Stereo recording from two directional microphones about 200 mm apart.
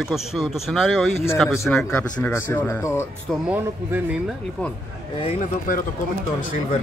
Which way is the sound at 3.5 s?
10° right (ahead or behind).